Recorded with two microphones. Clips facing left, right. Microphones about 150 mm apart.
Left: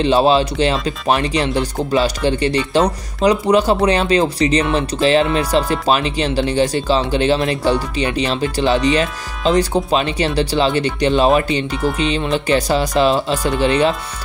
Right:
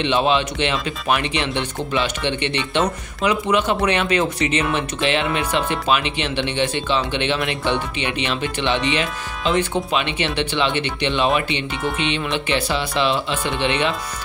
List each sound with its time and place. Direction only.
0.0 s speech: 35° left (ahead or behind)
9.0 s speech: centre (ahead or behind)
9.8 s speech: 35° left (ahead or behind)